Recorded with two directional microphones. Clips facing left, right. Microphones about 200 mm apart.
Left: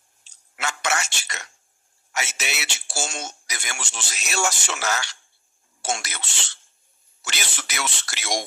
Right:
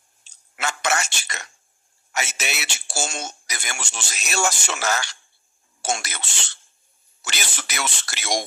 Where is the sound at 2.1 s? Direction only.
45° right (ahead or behind).